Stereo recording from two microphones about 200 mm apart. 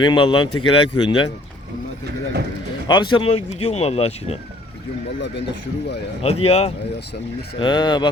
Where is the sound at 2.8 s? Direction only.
20° left (ahead or behind).